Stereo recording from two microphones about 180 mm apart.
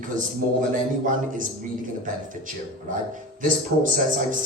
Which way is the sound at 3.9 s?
50° right (ahead or behind).